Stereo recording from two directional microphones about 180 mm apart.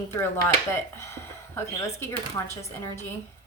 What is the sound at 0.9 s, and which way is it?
A woman's voice, 15° left (ahead or behind).